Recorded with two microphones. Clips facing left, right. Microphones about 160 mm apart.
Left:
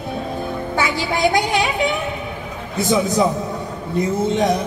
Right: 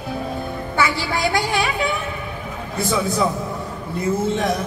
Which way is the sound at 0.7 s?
20° left (ahead or behind).